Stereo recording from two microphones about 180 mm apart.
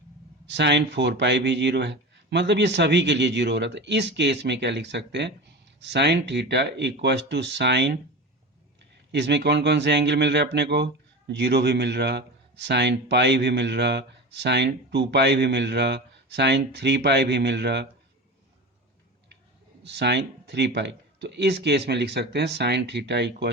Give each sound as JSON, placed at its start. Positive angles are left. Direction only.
{"t": 0.4, "sound": "speech", "side_deg": -75}
{"t": 9.1, "sound": "speech", "side_deg": -70}
{"t": 19.8, "sound": "speech", "side_deg": -70}